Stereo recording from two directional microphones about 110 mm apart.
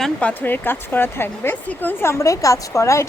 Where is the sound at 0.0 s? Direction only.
10° left (ahead or behind).